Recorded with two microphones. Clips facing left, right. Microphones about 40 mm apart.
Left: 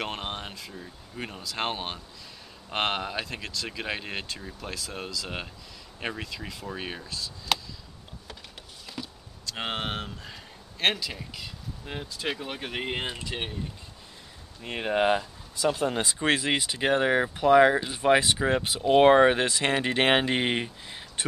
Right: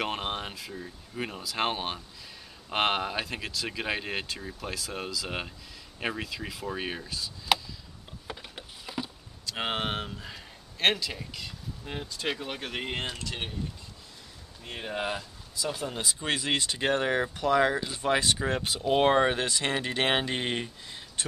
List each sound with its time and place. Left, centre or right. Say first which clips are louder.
0.0 s speech: right 2 dB; centre
8.3 s a sound: right 5 dB; centre
9.5 s speech: right 1 dB; centre
14.6 s speech: left 8 dB; left
16.3 s speech: left 5 dB; left
16.7 s speech: left 4 dB; centre